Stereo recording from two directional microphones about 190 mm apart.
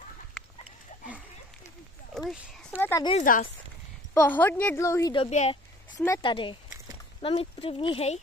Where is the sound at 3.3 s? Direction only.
45° left (ahead or behind).